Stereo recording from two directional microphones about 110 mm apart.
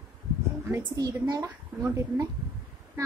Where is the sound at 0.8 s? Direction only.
40° right (ahead or behind).